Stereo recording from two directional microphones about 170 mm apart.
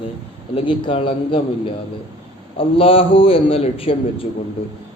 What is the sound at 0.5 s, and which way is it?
Speech, 30° left (ahead or behind).